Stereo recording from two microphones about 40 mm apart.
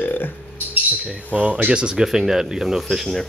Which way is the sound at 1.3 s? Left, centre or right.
Right.